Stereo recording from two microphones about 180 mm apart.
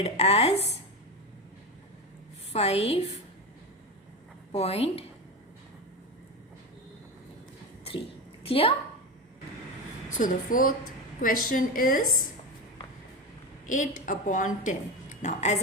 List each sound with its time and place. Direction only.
0.0 s speech: 35° left (ahead or behind)
2.5 s speech: 35° left (ahead or behind)
4.5 s speech: 35° left (ahead or behind)
8.4 s speech: 30° left (ahead or behind)
10.2 s a woman's voice: 50° left (ahead or behind)
13.7 s a woman's voice: 45° left (ahead or behind)